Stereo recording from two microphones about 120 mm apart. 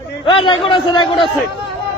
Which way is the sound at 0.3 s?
45° left (ahead or behind).